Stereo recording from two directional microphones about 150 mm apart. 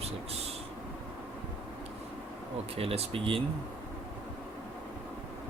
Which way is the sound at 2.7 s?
40° right (ahead or behind).